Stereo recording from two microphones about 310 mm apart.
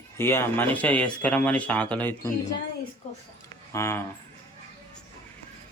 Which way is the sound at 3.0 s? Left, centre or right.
Left.